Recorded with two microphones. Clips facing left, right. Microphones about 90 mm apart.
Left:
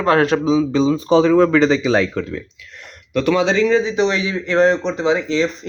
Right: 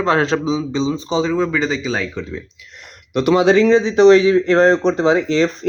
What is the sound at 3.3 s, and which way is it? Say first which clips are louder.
Speech: right 5 dB; 55° right (ahead or behind).